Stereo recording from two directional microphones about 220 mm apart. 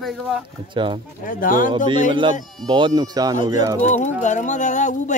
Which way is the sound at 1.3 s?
40° left (ahead or behind).